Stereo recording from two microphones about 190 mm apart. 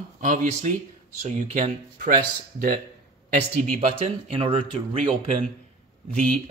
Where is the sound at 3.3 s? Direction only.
40° right (ahead or behind).